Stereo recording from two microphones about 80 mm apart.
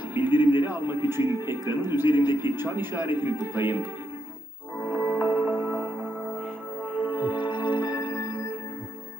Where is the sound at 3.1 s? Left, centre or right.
Left.